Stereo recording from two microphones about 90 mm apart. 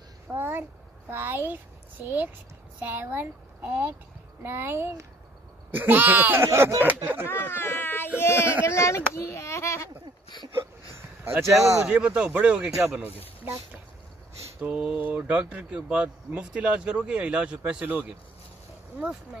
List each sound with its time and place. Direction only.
0.3 s a sound: 25° right (ahead or behind)
1.1 s speech: 25° right (ahead or behind)
7.2 s a sound: 25° left (ahead or behind)
8.2 s speech: 30° left (ahead or behind)
11.4 s speech: 5° right (ahead or behind)
14.6 s speech: 10° right (ahead or behind)